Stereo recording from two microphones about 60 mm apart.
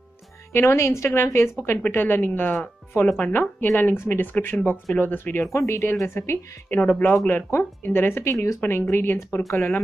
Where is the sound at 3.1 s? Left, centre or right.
Left.